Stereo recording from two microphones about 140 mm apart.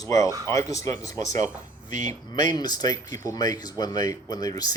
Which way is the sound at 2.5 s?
30° left (ahead or behind).